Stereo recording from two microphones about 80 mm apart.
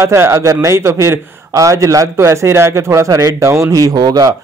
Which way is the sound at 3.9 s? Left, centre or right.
Right.